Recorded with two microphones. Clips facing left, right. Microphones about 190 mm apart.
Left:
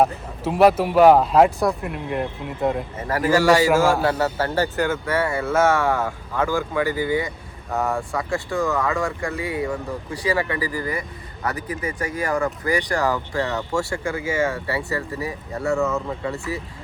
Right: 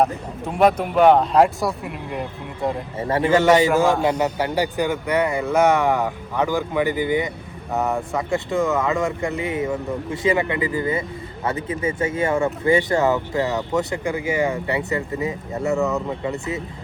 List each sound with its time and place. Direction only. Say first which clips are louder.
0.0 s speech: left 1 dB; 5° left (ahead or behind)
3.0 s speech: right 2 dB; 25° right (ahead or behind)